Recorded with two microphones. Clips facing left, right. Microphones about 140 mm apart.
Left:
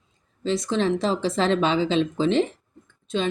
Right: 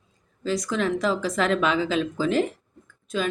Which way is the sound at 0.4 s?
25° left (ahead or behind).